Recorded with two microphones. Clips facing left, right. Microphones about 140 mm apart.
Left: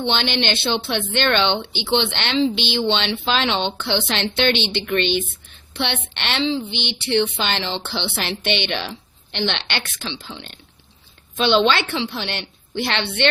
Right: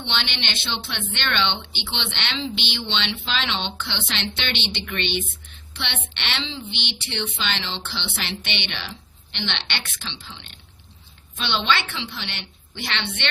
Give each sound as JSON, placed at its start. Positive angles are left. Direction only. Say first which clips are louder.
{"t": 0.0, "sound": "a woman's voice", "louder": "left 8 dB", "side_deg": 40}